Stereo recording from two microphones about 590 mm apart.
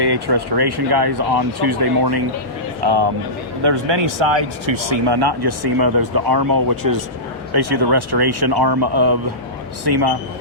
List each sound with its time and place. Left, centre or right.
0.0 s speech: right